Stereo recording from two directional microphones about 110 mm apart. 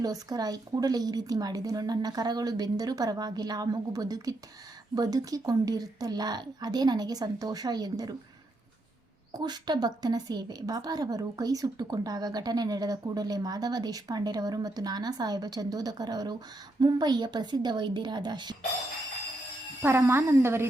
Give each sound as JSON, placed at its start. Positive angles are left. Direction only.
{"t": 0.0, "sound": "a woman's voice", "side_deg": -35}
{"t": 9.4, "sound": "a woman's voice", "side_deg": -40}
{"t": 19.8, "sound": "a woman's voice", "side_deg": -20}